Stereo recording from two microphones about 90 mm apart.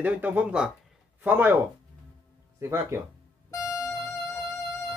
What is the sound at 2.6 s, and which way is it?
Speech, 30° right (ahead or behind).